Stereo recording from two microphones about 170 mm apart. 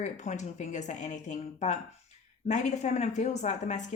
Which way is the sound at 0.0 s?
45° left (ahead or behind).